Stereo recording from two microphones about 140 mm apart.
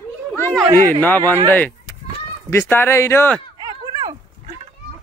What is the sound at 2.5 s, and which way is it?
Speech, 15° left (ahead or behind).